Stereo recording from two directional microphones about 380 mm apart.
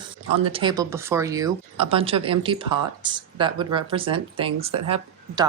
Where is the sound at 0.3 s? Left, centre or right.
Centre.